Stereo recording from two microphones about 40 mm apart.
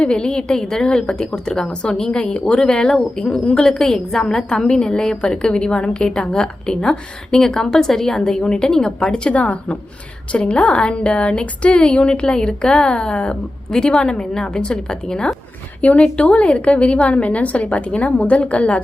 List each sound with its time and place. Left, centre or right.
0.0 s a woman's voice: left
9.3 s a woman's voice: left
13.7 s a woman's voice: centre
16.1 s a woman's voice: left